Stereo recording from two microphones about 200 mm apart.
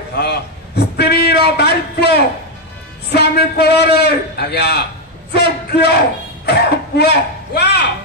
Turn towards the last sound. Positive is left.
turn(degrees=55)  # may be behind; listen again after turning